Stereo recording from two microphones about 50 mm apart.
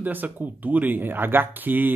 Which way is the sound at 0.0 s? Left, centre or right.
Right.